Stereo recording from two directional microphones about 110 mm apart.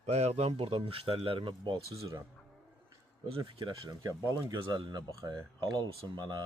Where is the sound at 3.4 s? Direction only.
45° right (ahead or behind).